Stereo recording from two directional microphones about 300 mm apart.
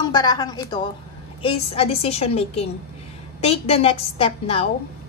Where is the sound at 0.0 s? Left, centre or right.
Centre.